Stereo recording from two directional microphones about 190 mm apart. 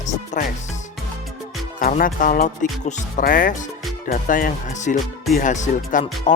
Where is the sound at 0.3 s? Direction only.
40° left (ahead or behind).